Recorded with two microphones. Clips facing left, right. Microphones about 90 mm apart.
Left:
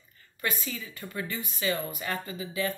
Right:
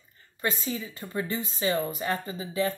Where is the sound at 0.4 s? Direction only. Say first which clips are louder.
Right 3 dB; 30° right (ahead or behind).